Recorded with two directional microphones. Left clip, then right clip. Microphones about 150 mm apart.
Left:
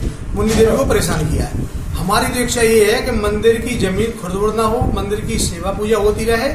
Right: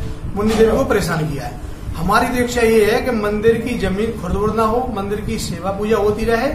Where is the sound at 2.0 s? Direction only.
Centre (ahead or behind).